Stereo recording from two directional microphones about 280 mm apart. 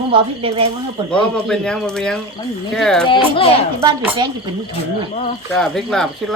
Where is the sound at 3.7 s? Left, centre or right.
Centre.